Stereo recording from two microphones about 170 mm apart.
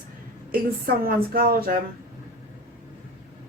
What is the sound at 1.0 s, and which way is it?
Speech, 60° right (ahead or behind).